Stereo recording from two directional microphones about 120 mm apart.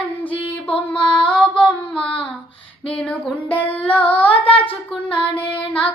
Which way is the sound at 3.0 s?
10° left (ahead or behind).